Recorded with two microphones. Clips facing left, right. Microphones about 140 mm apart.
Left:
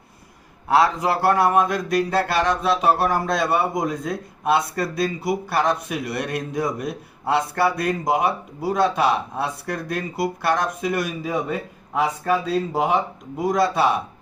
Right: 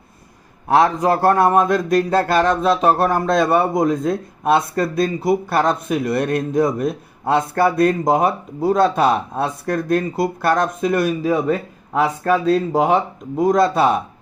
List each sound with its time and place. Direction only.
0.7 s speech: 45° right (ahead or behind)
8.6 s speech: 25° right (ahead or behind)
9.9 s speech: 50° right (ahead or behind)